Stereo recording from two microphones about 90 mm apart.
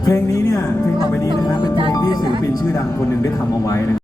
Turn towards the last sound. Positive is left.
turn(degrees=45)  # may be behind; listen again after turning